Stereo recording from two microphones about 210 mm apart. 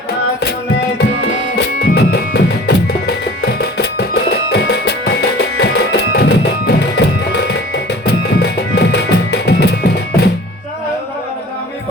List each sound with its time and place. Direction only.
1.5 s music: 50° left (ahead or behind)